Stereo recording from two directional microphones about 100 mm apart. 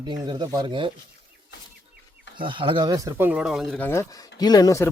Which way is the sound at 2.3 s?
55° right (ahead or behind).